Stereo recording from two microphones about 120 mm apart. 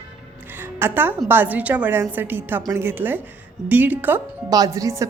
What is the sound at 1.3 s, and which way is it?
Speech, 15° right (ahead or behind).